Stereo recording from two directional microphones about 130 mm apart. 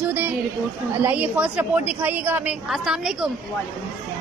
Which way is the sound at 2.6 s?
Centre (ahead or behind).